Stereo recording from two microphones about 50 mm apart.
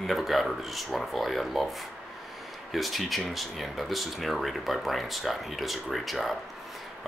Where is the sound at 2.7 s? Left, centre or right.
Centre.